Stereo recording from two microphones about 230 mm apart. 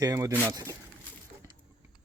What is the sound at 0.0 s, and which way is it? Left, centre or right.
Speech, centre.